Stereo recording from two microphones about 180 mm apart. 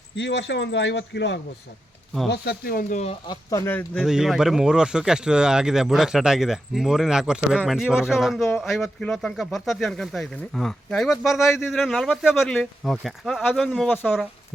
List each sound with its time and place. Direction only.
0.2 s speech: 75° left (ahead or behind)
2.3 s speech: 65° left (ahead or behind)
3.0 s speech: 35° left (ahead or behind)
3.5 s speech: 10° left (ahead or behind)
4.0 s speech: centre (ahead or behind)